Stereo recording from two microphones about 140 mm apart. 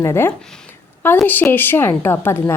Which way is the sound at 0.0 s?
20° left (ahead or behind).